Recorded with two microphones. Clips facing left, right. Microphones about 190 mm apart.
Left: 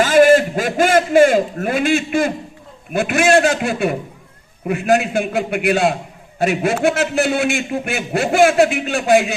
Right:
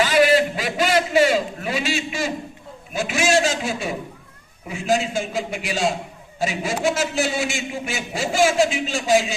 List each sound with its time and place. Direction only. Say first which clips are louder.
0.0 s a man's voice: left 6 dB; 50° left (ahead or behind)